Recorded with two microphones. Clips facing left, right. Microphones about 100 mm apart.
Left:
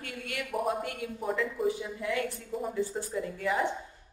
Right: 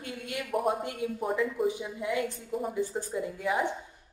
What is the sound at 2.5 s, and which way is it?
Speech, 5° right (ahead or behind).